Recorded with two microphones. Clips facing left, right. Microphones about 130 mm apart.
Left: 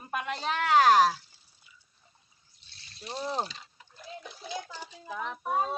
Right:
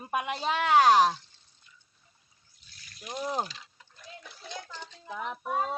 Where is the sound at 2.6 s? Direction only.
30° left (ahead or behind).